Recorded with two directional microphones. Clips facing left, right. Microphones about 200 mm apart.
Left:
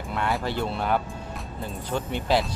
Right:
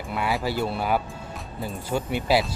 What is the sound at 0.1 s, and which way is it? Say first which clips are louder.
Speech: right 1 dB; 5° right (ahead or behind).